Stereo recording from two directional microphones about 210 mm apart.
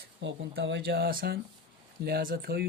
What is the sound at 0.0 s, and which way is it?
Speech, 55° right (ahead or behind).